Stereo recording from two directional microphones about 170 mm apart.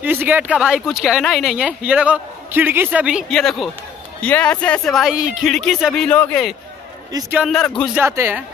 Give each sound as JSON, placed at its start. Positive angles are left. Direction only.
{"t": 0.0, "sound": "speech", "side_deg": -10}
{"t": 7.1, "sound": "a man's voice", "side_deg": -20}
{"t": 7.3, "sound": "speech", "side_deg": 0}
{"t": 7.9, "sound": "speech", "side_deg": -10}